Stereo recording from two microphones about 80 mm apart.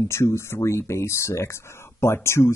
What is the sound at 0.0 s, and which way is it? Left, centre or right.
Speech, left.